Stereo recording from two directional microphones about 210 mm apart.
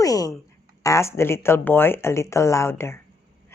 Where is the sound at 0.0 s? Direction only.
15° left (ahead or behind).